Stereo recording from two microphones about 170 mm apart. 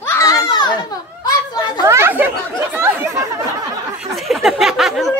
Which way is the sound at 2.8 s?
15° right (ahead or behind).